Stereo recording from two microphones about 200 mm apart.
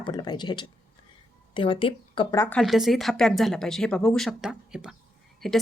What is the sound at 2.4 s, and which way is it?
Speech, 5° left (ahead or behind).